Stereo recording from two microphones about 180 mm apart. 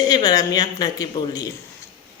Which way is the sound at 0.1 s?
20° left (ahead or behind).